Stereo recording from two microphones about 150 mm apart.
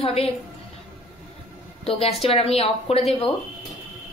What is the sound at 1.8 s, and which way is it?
A woman's voice, 40° left (ahead or behind).